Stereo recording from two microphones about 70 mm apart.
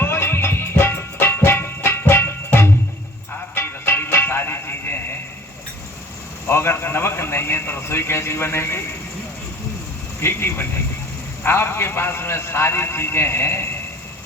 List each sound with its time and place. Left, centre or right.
0.0 s music: left
6.5 s a sound: left
10.2 s a man's voice: left